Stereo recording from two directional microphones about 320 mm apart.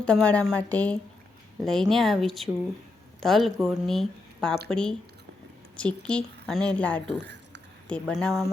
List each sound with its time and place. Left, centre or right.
0.0 s a woman's voice: centre
7.2 s squish: right
7.9 s a woman's voice: centre